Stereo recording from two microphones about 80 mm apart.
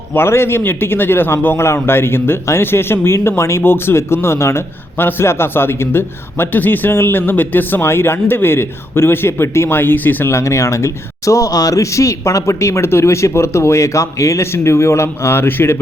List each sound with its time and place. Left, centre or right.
0.1 s a man's voice: left
10.3 s speech: left